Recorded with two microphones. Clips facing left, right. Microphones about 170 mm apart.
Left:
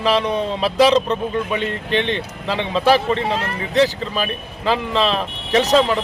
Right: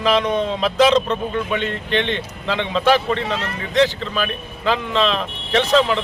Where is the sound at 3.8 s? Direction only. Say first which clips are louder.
Even; 5° left (ahead or behind).